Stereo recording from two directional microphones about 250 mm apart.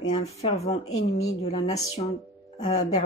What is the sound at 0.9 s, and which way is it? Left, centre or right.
Speech, left.